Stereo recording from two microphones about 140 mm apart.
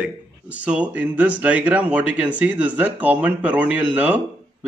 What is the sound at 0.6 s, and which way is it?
A man's voice, 10° right (ahead or behind).